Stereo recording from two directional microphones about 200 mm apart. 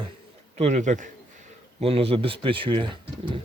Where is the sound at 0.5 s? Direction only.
35° right (ahead or behind).